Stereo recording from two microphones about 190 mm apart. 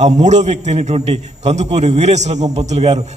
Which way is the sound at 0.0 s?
35° right (ahead or behind).